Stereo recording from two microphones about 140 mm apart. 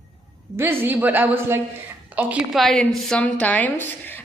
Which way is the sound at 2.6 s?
Centre (ahead or behind).